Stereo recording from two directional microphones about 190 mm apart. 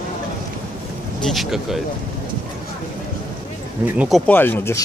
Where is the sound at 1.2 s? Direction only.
Centre (ahead or behind).